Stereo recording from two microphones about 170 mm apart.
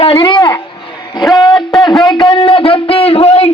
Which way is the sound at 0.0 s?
30° left (ahead or behind).